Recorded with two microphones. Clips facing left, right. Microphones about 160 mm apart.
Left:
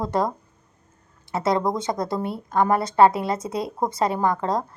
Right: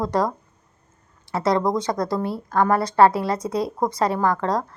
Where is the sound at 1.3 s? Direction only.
25° left (ahead or behind).